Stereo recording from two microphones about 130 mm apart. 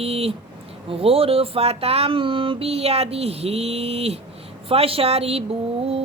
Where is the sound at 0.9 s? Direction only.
45° right (ahead or behind).